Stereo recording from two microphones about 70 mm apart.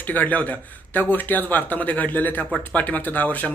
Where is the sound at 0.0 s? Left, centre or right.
Left.